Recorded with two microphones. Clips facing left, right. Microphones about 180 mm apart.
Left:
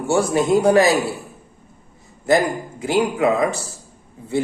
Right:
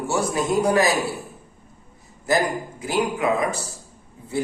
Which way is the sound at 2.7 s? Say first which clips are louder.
Left 5 dB; 25° left (ahead or behind).